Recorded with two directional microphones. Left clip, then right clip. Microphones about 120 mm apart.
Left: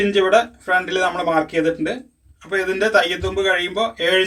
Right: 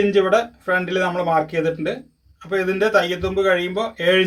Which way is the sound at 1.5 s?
90° right.